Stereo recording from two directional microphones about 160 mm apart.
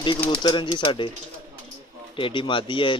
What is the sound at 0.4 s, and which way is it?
Speech, 30° left (ahead or behind).